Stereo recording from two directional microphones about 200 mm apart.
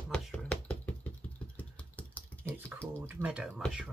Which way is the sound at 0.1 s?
5° left (ahead or behind).